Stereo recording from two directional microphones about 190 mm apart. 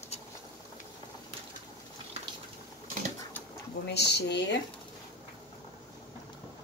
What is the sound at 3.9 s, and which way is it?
Speech, 60° left (ahead or behind).